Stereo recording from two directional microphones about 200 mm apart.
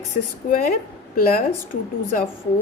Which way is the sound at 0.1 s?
35° left (ahead or behind).